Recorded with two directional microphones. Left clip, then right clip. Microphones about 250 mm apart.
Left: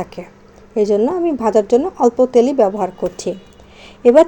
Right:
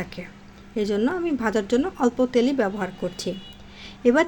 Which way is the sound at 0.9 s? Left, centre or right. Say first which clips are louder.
Left 8 dB; centre.